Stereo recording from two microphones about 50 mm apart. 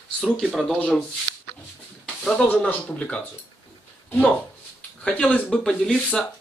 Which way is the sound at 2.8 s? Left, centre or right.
Left.